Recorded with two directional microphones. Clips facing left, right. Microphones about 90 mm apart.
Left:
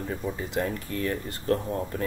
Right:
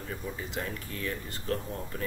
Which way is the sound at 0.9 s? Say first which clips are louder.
Left 6 dB; 40° left (ahead or behind).